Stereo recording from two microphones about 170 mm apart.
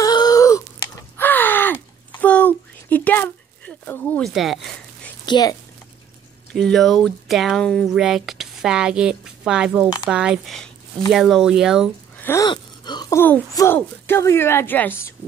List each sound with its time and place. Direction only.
0.0 s a sound: 20° left (ahead or behind); by 4.6 s centre (ahead or behind)
5.2 s a woman's voice: 25° left (ahead or behind)
6.5 s speech: centre (ahead or behind)
12.2 s speech: 15° left (ahead or behind)
12.4 s a sound: 25° left (ahead or behind)
13.2 s a woman's voice: 15° left (ahead or behind)